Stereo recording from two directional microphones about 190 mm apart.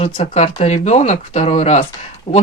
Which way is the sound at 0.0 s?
35° left (ahead or behind).